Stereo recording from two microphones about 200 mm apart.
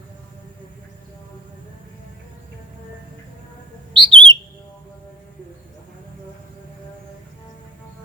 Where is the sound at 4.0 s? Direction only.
25° right (ahead or behind).